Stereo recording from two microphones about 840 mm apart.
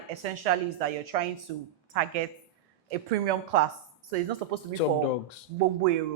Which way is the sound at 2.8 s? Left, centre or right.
Right.